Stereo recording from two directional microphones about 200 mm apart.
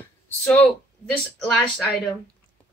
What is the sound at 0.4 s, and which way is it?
Speech, 10° left (ahead or behind).